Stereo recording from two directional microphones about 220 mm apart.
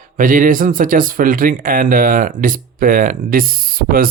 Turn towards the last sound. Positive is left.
turn(degrees=-40)  # may be behind; listen again after turning